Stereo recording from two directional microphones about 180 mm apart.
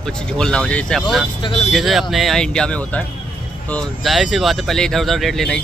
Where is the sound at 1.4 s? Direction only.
30° left (ahead or behind).